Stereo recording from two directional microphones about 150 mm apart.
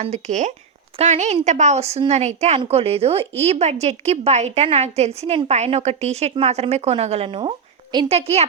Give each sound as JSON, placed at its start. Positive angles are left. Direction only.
{"t": 0.0, "sound": "a woman's voice", "side_deg": -50}